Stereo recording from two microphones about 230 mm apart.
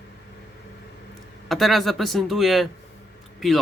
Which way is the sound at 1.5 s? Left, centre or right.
Centre.